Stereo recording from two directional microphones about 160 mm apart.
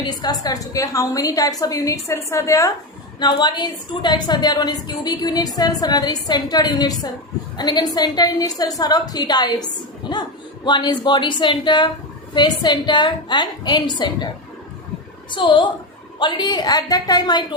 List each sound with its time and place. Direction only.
0.0 s a woman's voice: 25° left (ahead or behind)
10.0 s a sound: 30° left (ahead or behind)
10.7 s a woman's voice: 25° left (ahead or behind)
15.3 s a woman's voice: 30° left (ahead or behind)